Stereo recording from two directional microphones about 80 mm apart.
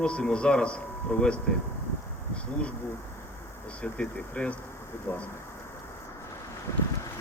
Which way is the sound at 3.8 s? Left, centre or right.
Centre.